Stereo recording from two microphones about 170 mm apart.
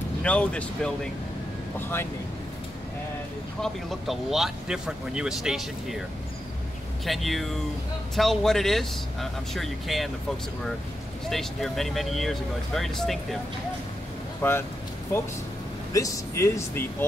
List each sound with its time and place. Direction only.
0.2 s speech: 5° left (ahead or behind)
3.6 s speech: centre (ahead or behind)
7.1 s speech: centre (ahead or behind)
11.2 s speech: centre (ahead or behind)
14.4 s speech: 15° left (ahead or behind)
15.9 s speech: 20° left (ahead or behind)